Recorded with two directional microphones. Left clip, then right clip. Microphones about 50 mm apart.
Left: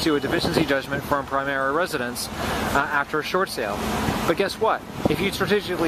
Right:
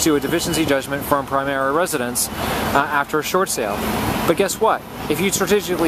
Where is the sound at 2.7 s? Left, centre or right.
Right.